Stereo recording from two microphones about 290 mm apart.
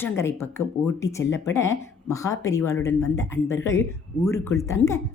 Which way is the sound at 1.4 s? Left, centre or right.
Centre.